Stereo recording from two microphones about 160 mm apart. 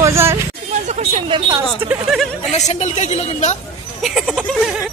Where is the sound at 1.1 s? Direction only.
30° right (ahead or behind).